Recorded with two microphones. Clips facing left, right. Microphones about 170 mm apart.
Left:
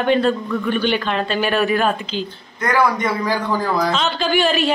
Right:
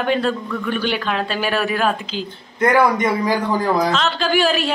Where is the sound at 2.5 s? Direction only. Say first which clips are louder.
Right 3 dB; 20° right (ahead or behind).